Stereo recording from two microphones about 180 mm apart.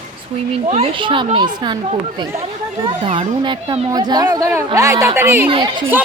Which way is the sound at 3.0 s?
25° right (ahead or behind).